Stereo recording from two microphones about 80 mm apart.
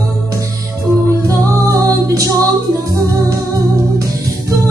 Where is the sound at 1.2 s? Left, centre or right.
Right.